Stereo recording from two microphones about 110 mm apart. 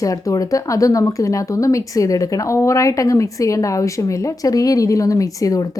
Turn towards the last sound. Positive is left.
turn(degrees=30)  # may be behind; listen again after turning